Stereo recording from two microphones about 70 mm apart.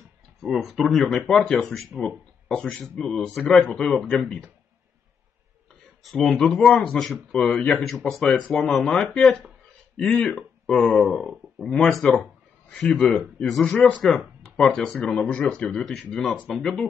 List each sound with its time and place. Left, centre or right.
0.4 s speech: centre
6.0 s speech: centre
7.0 s speech: centre
7.4 s speech: centre
15.8 s speech: centre